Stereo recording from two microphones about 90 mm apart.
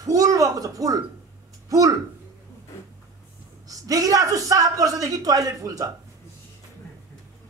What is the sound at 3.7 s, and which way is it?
A man's voice, 40° right (ahead or behind).